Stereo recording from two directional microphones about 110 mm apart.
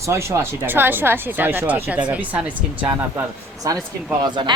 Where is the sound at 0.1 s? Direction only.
25° right (ahead or behind).